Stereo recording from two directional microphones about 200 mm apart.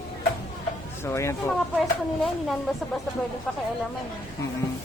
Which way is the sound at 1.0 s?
15° left (ahead or behind).